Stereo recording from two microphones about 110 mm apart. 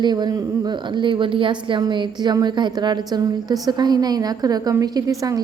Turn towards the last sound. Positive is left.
turn(degrees=-30)  # may be behind; listen again after turning